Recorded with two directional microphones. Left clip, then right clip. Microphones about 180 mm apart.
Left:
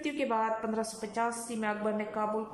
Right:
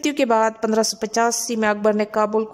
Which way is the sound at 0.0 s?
70° right (ahead or behind).